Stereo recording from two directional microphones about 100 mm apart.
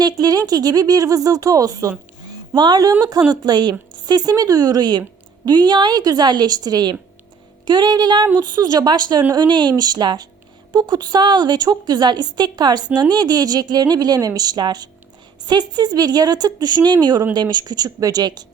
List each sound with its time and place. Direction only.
0.0 s a woman's voice: 40° right (ahead or behind)